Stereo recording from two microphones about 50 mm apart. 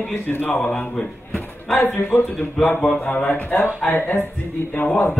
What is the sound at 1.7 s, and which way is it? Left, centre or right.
Speech, left.